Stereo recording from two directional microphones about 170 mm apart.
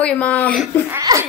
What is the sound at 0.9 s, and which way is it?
Speech, 20° right (ahead or behind).